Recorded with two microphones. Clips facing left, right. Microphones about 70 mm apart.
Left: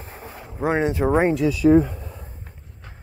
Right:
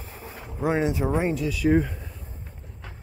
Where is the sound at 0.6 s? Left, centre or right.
Left.